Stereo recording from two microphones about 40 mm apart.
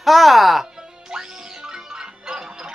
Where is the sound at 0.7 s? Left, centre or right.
Centre.